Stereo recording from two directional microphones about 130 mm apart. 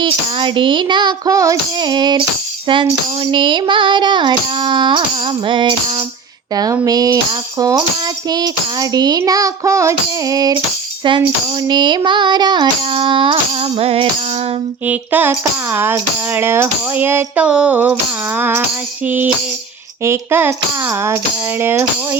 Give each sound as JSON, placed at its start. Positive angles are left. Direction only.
{"t": 0.0, "sound": "carnatic music", "side_deg": -40}
{"t": 3.3, "sound": "carnatic music", "side_deg": -40}
{"t": 6.5, "sound": "tambourine", "side_deg": -30}
{"t": 11.7, "sound": "carnatic music", "side_deg": -35}
{"t": 14.8, "sound": "tambourine", "side_deg": -15}